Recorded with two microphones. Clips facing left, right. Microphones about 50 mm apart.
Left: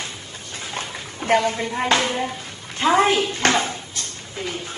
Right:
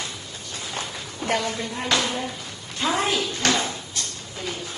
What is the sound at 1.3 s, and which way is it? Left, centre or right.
Speech, left.